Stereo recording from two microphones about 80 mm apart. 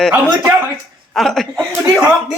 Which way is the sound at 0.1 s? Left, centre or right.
Right.